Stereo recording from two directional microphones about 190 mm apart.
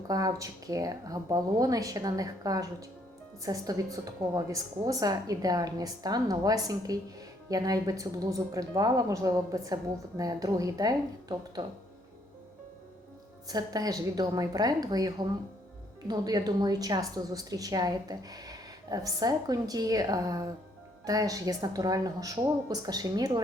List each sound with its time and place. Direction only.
0.1 s a woman's voice: 20° right (ahead or behind)
13.5 s a woman's voice: 20° right (ahead or behind)